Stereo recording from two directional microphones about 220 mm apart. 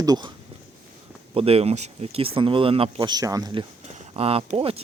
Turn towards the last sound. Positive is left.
turn(degrees=-25)  # may be behind; listen again after turning